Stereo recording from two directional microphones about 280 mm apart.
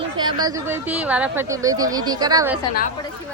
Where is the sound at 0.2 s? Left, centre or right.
Centre.